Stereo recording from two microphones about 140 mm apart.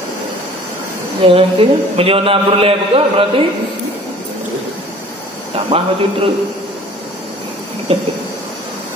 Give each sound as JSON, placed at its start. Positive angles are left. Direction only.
{"t": 1.2, "sound": "a man's voice", "side_deg": -40}
{"t": 5.5, "sound": "speech", "side_deg": -45}
{"t": 7.9, "sound": "speech", "side_deg": -45}